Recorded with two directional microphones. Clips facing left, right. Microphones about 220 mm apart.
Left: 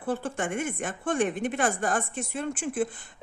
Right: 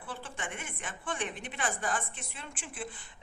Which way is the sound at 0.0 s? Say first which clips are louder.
Left 12 dB; 45° left (ahead or behind).